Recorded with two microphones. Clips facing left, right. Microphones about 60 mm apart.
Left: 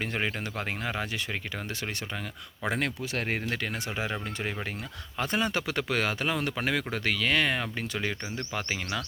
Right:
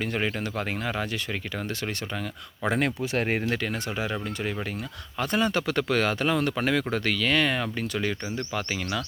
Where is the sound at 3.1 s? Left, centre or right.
Right.